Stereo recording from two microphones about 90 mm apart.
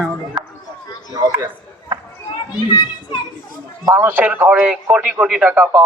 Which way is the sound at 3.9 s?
20° right (ahead or behind).